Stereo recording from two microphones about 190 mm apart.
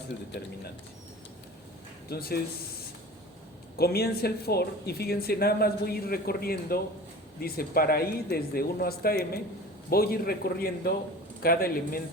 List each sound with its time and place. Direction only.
2.0 s speech: 55° left (ahead or behind)
3.8 s speech: 55° left (ahead or behind)